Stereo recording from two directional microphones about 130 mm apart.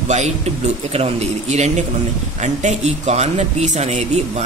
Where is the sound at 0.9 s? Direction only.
55° right (ahead or behind).